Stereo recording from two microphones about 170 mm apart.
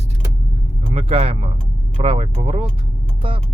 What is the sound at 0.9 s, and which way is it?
Speech, 35° right (ahead or behind).